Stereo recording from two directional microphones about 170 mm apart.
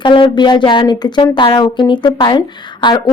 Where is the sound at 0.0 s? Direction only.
30° left (ahead or behind).